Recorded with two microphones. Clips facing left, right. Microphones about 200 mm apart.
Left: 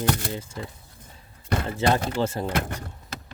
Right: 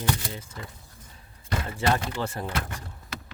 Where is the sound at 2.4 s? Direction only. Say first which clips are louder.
Left 5 dB; 45° left (ahead or behind).